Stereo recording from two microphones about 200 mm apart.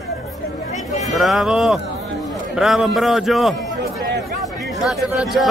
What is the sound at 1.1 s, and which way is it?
A man's voice, centre (ahead or behind).